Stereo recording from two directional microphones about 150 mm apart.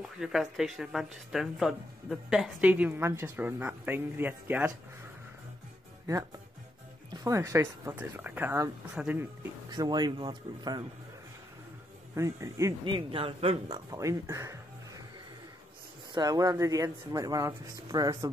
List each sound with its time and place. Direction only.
0.2 s speech: 5° right (ahead or behind)
7.2 s speech: 20° right (ahead or behind)
9.7 s speech: 30° right (ahead or behind)
12.2 s speech: 20° right (ahead or behind)
12.8 s a man's voice: 35° right (ahead or behind)
13.7 s speech: 20° right (ahead or behind)
16.1 s speech: 25° right (ahead or behind)